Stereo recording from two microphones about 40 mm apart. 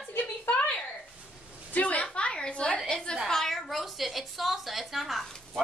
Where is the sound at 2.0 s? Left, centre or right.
Left.